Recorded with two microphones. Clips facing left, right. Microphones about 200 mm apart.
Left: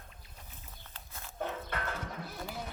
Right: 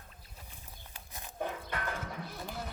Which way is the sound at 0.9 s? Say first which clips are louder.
Right 1 dB; 15° right (ahead or behind).